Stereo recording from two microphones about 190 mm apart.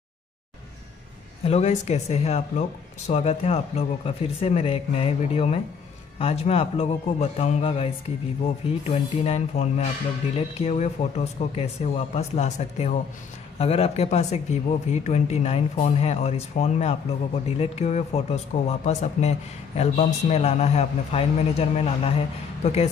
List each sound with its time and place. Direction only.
1.4 s speech: 35° left (ahead or behind)